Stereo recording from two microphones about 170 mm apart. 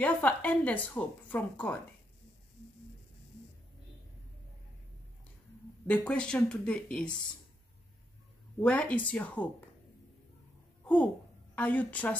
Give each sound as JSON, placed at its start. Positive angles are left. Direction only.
{"t": 0.0, "sound": "speech", "side_deg": 10}
{"t": 5.9, "sound": "speech", "side_deg": 5}
{"t": 8.5, "sound": "speech", "side_deg": 5}
{"t": 11.5, "sound": "speech", "side_deg": 10}